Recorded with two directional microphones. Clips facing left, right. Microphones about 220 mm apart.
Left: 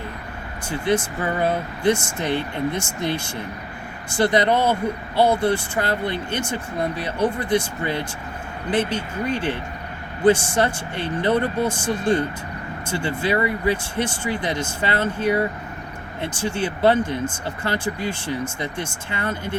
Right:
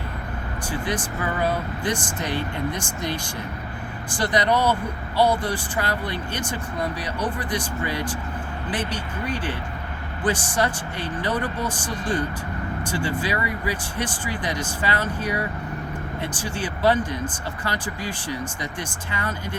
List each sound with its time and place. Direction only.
0.7 s speech: 25° left (ahead or behind)
4.2 s speech: 25° left (ahead or behind)